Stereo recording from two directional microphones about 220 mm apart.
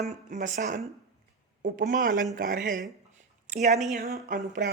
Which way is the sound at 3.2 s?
35° right (ahead or behind).